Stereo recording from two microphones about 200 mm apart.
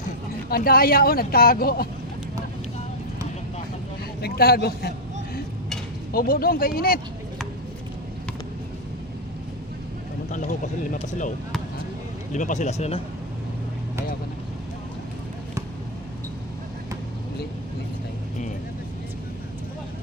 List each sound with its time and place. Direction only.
0.5 s speech: 50° left (ahead or behind)
4.2 s a man's voice: 50° left (ahead or behind)
10.3 s speech: 40° left (ahead or behind)
12.3 s speech: 40° left (ahead or behind)